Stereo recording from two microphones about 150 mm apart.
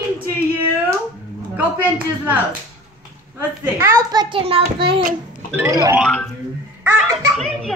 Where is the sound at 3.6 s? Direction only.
20° right (ahead or behind); by 5.0 s 35° right (ahead or behind).